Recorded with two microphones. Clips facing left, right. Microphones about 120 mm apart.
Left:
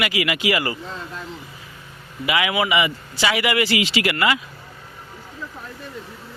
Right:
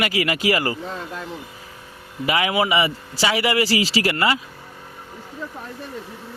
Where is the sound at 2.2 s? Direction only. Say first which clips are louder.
Right 1 dB; 35° right (ahead or behind).